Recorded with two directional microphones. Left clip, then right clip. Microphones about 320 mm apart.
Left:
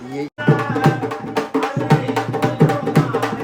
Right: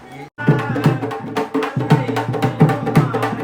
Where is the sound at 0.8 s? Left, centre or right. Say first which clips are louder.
Left 2 dB; centre.